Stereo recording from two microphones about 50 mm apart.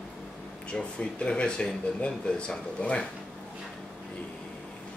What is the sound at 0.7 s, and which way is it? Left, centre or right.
Speech, left.